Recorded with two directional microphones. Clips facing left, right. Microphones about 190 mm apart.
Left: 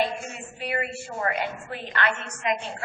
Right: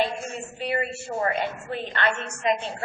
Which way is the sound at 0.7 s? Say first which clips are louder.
Right 2 dB; 30° right (ahead or behind).